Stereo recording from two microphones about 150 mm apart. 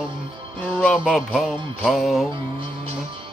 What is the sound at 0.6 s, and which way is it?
Speech, 10° left (ahead or behind).